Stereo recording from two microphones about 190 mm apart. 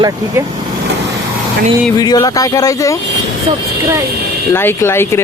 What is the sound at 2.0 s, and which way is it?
Speech, 20° left (ahead or behind).